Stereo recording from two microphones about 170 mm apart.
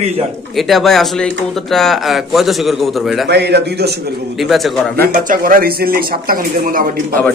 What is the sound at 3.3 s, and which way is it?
Speech, 80° right.